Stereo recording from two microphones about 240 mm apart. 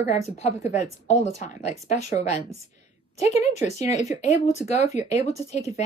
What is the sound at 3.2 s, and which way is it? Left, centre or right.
Speech, left.